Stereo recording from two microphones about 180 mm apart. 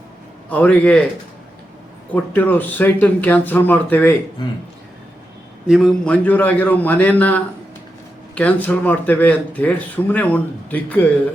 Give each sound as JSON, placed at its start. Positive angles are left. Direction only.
{"t": 0.5, "sound": "speech", "side_deg": 10}
{"t": 2.1, "sound": "speech", "side_deg": 10}
{"t": 4.4, "sound": "a man's voice", "side_deg": 25}
{"t": 5.6, "sound": "speech", "side_deg": 0}